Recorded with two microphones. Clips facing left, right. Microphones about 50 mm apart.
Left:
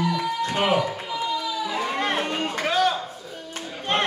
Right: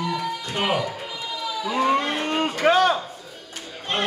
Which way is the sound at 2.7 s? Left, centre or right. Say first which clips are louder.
Right 5 dB; right.